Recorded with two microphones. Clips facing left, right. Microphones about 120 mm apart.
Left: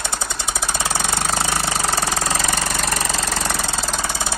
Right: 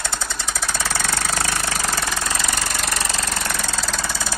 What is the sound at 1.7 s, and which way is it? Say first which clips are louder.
Engine: left 3 dB; 30° left (ahead or behind).